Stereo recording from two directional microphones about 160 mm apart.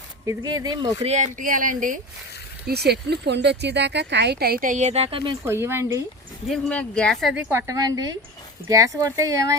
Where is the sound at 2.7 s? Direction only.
90° right; by 5.3 s 35° right (ahead or behind).